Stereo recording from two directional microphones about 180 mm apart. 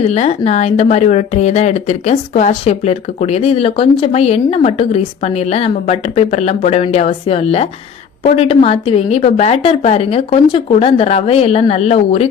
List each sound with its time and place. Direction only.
0.0 s a woman's voice: 35° left (ahead or behind)